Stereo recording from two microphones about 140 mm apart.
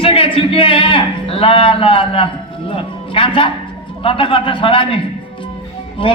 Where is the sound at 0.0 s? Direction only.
40° left (ahead or behind).